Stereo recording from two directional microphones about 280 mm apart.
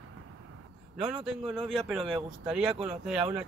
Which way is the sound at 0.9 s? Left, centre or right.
Centre.